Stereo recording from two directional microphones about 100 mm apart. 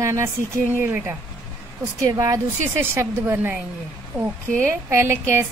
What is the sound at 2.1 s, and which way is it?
A woman's voice, 35° right (ahead or behind).